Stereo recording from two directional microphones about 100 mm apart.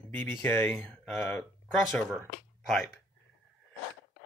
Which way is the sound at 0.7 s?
10° left (ahead or behind).